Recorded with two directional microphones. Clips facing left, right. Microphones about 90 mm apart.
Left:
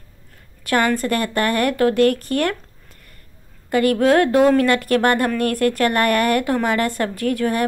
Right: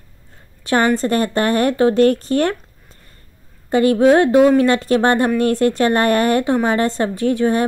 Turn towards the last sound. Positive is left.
turn(degrees=-25)  # may be behind; listen again after turning